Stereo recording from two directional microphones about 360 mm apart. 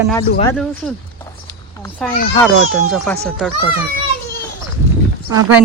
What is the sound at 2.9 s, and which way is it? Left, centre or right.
Speech, centre.